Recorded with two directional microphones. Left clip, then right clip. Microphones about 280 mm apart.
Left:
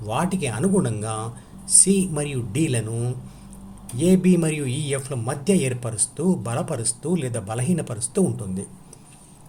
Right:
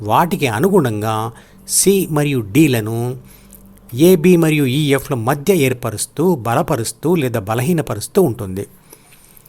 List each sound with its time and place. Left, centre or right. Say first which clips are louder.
0.0 s speech: right 11 dB; right